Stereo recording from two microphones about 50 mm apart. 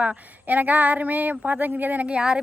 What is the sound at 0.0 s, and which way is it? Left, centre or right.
Speech, right.